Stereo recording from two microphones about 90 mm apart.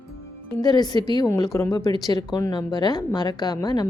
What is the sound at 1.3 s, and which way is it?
Speech, 35° left (ahead or behind).